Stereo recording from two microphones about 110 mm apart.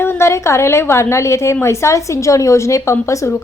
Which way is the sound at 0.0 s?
20° left (ahead or behind).